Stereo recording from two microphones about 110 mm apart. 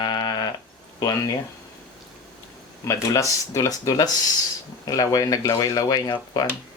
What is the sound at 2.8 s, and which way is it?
Speech, 30° left (ahead or behind).